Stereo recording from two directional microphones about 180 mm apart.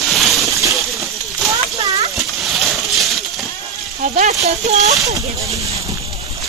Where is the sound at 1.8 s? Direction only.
35° right (ahead or behind).